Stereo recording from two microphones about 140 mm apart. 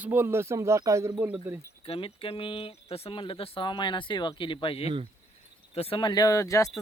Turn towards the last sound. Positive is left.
turn(degrees=25)  # may be behind; listen again after turning